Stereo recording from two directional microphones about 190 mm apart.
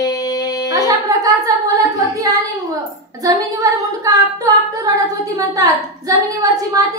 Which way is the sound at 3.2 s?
20° right (ahead or behind).